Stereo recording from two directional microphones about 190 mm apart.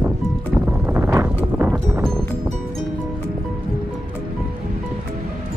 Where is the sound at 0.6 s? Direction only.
10° right (ahead or behind).